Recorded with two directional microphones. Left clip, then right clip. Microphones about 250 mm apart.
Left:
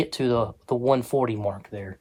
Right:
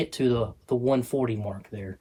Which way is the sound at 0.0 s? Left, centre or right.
Left.